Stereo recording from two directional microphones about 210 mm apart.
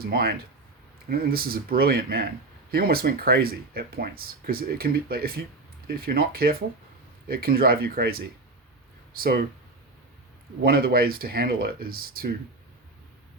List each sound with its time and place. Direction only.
0.0 s speech: 45° right (ahead or behind)
10.6 s speech: 45° right (ahead or behind)